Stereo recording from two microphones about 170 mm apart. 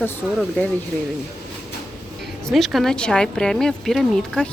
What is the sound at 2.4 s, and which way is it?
Speech, centre (ahead or behind).